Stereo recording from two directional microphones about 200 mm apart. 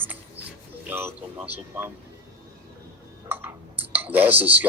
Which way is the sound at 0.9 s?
10° right (ahead or behind).